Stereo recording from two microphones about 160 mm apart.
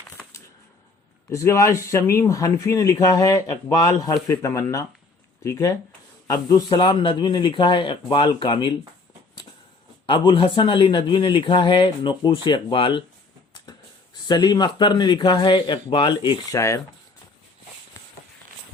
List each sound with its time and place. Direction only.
1.3 s speech: 20° left (ahead or behind)
10.1 s speech: 30° left (ahead or behind)
14.3 s speech: 25° left (ahead or behind)
16.6 s speech: 20° left (ahead or behind)
18.0 s a sound: 15° left (ahead or behind)